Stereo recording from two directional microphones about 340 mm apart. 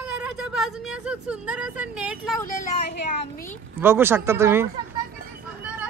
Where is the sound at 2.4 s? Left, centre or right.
Left.